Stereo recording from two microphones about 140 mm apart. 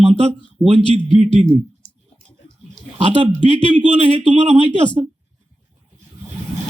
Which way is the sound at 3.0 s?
45° right (ahead or behind).